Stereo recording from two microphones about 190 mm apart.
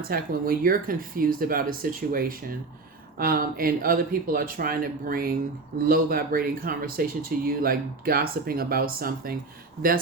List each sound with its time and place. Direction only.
0.1 s speech: 50° right (ahead or behind)